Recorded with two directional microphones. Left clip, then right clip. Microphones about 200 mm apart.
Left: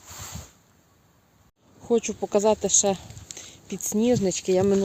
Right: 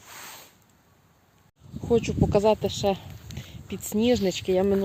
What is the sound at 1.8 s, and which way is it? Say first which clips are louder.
Speech: even; centre (ahead or behind).